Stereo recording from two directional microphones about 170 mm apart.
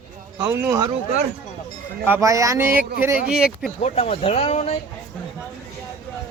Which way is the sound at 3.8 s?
40° left (ahead or behind).